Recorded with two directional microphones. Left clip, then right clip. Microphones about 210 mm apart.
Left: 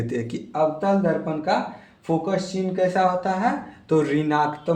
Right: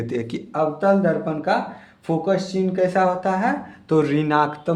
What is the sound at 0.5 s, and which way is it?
Speech, 35° right (ahead or behind).